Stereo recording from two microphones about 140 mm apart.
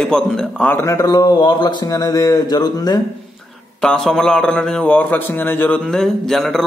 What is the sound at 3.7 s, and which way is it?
A man's voice, 5° left (ahead or behind).